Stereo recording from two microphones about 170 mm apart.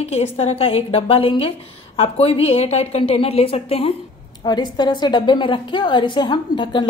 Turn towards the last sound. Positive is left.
turn(degrees=30)  # may be behind; listen again after turning